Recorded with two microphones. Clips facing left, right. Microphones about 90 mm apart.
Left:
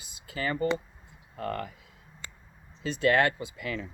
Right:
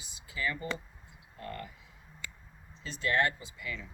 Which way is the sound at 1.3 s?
70° left (ahead or behind).